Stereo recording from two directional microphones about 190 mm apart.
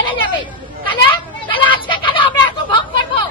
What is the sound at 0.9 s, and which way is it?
Children playing, 25° left (ahead or behind).